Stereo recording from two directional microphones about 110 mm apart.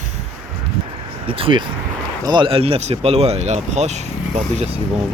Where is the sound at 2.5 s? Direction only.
60° right (ahead or behind); by 4.7 s 90° right.